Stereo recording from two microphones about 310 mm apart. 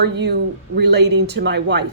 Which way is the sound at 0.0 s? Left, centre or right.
Right.